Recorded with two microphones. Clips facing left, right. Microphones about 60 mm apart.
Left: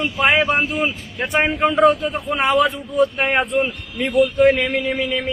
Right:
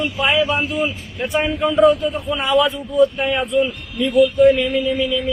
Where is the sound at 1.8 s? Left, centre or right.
Left.